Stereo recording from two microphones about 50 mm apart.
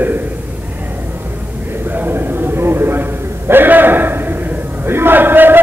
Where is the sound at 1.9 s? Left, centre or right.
Right.